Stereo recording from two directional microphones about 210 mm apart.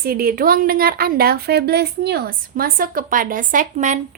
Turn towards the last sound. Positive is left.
turn(degrees=-35)  # may be behind; listen again after turning